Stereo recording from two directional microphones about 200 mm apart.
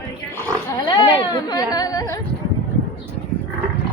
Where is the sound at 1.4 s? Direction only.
20° left (ahead or behind).